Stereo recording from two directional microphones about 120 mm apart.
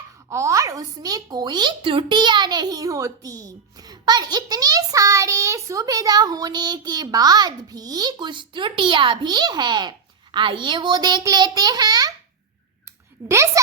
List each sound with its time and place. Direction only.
0.3 s a woman's voice: 25° right (ahead or behind)
13.2 s a woman's voice: 25° right (ahead or behind)